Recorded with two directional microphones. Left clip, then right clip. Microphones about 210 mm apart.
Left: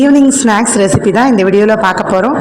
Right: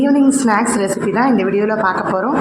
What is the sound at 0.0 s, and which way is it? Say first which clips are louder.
Speech: left 5 dB; 30° left (ahead or behind).